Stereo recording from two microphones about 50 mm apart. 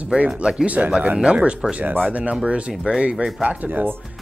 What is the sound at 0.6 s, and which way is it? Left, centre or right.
Speech, right.